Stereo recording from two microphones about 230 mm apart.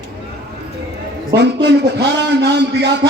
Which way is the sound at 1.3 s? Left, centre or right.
Right.